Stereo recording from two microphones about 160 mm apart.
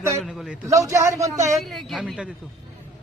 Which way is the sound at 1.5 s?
Centre (ahead or behind).